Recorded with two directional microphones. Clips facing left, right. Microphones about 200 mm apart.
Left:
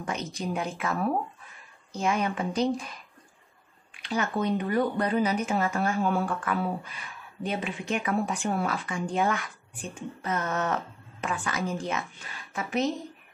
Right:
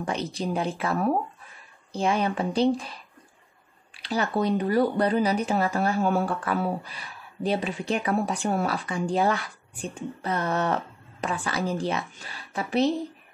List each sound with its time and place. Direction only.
0.0 s speech: 30° right (ahead or behind)